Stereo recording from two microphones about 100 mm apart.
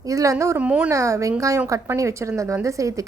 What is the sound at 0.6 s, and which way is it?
Speech, 10° right (ahead or behind).